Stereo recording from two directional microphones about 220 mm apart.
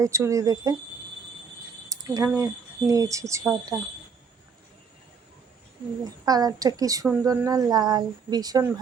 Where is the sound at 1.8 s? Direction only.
15° right (ahead or behind).